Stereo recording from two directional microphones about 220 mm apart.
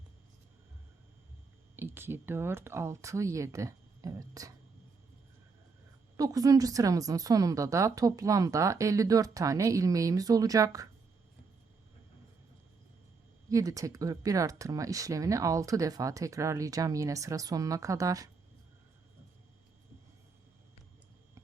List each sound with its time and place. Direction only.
1.7 s speech: 10° right (ahead or behind)
6.1 s speech: 15° right (ahead or behind)
13.5 s speech: 15° right (ahead or behind)